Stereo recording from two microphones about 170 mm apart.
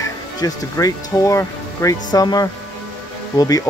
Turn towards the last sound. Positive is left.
turn(degrees=20)  # may be behind; listen again after turning